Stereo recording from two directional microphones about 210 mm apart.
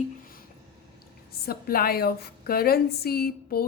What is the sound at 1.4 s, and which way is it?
A woman's voice, 45° left (ahead or behind).